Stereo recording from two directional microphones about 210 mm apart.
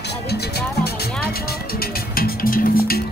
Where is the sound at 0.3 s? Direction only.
50° left (ahead or behind).